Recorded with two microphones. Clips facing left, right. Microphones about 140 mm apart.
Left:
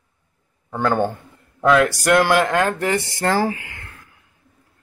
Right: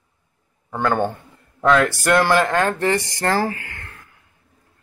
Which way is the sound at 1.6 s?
5° left (ahead or behind).